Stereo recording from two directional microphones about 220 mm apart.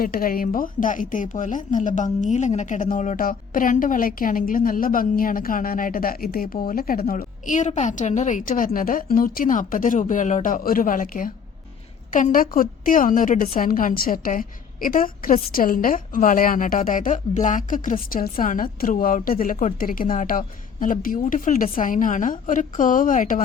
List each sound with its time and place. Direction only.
0.0 s a woman's voice: 40° left (ahead or behind)